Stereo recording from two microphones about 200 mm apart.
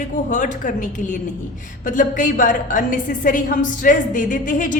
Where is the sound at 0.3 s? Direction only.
40° left (ahead or behind).